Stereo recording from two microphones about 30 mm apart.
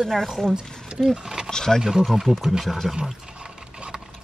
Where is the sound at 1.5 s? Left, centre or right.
Centre.